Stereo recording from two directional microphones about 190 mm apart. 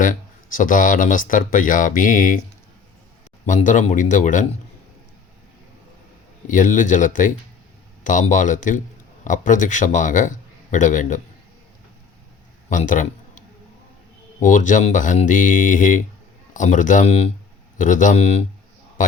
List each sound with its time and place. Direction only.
0.0 s speech: 45° left (ahead or behind)
3.4 s a man's voice: 40° left (ahead or behind)
6.5 s a man's voice: 45° left (ahead or behind)
12.6 s a man's voice: 45° left (ahead or behind)
14.4 s a man's voice: 40° left (ahead or behind)